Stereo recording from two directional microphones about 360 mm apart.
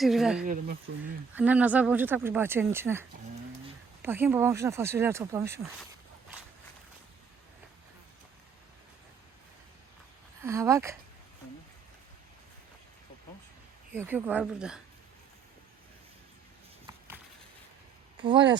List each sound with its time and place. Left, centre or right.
0.0 s speech: centre
0.4 s speech: right
1.3 s speech: centre
10.4 s speech: centre
13.9 s speech: centre